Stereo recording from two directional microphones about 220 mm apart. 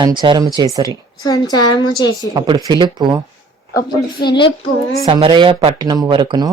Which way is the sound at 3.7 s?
15° left (ahead or behind).